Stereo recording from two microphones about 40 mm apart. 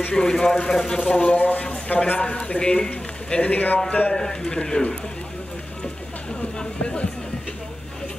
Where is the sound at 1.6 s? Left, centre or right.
Left.